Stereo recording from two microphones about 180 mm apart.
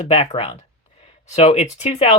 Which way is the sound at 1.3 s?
35° left (ahead or behind).